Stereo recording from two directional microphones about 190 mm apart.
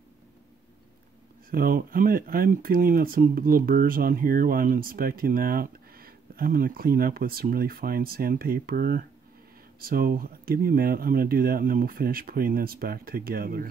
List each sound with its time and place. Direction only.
1.5 s speech: 50° right (ahead or behind)